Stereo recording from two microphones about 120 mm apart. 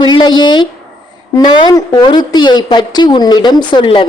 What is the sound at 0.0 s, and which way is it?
A woman's voice, 35° left (ahead or behind).